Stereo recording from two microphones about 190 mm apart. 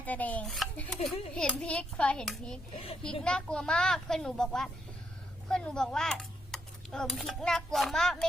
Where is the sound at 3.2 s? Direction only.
5° left (ahead or behind).